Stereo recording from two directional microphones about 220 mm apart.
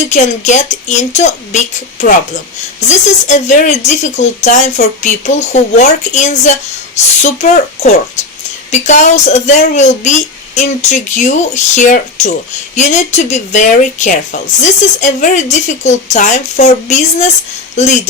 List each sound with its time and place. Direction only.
0.0 s a woman's voice: 30° left (ahead or behind)